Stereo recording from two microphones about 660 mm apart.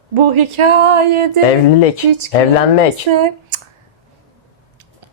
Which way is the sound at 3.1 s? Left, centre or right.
Right.